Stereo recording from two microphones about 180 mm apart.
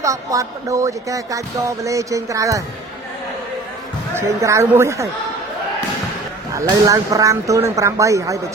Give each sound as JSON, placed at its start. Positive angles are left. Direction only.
{"t": 0.0, "sound": "speech", "side_deg": -20}
{"t": 4.1, "sound": "speech", "side_deg": -15}
{"t": 6.6, "sound": "speech", "side_deg": -20}